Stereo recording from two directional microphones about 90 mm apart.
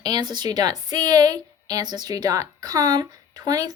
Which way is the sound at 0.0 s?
50° right (ahead or behind).